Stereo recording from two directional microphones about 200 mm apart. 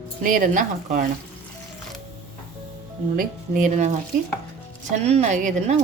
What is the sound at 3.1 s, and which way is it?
Speech, 45° right (ahead or behind).